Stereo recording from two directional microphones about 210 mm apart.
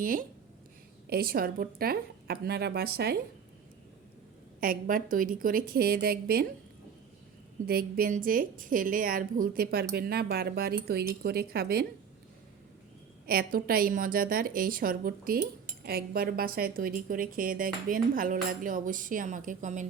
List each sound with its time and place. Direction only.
1.1 s a woman's voice: 45° right (ahead or behind)
4.6 s a woman's voice: 40° right (ahead or behind)
7.7 s a woman's voice: 45° right (ahead or behind)
13.2 s a woman's voice: 45° right (ahead or behind)